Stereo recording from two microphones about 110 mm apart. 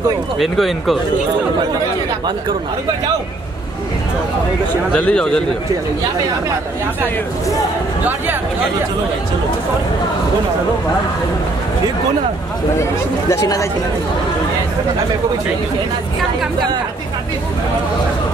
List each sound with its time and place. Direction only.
0.4 s speech: centre (ahead or behind)
4.9 s a man's voice: 5° left (ahead or behind)
13.3 s speech: 30° left (ahead or behind)